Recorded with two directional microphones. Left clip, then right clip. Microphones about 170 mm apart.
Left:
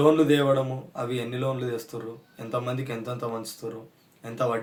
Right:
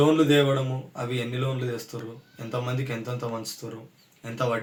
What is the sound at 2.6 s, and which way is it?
A man's voice, 30° left (ahead or behind).